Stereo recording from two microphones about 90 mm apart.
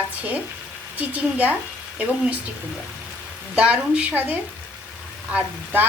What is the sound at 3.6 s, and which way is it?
Speech, 15° right (ahead or behind).